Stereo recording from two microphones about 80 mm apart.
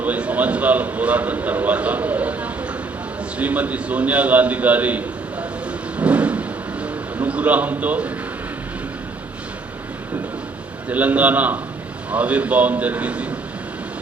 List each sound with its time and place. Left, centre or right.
0.0 s a man's voice: centre
6.0 s vehicle: centre
6.8 s a sound: centre
10.8 s a man's voice: centre